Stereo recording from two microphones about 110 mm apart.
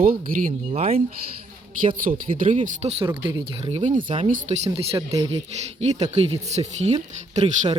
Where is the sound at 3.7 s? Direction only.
90° right.